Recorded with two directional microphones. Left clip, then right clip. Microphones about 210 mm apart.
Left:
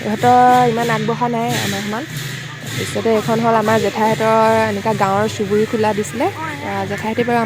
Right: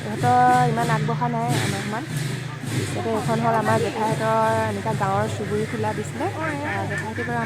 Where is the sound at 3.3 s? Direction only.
30° left (ahead or behind).